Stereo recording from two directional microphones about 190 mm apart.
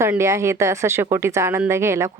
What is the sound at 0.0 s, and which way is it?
A woman's voice, 15° right (ahead or behind).